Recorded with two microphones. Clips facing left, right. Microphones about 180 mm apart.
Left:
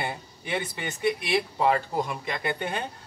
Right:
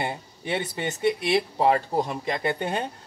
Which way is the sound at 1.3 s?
30° right (ahead or behind).